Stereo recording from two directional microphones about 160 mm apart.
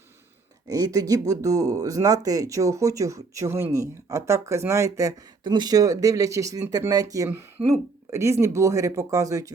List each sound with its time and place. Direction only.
0.7 s speech: 20° right (ahead or behind)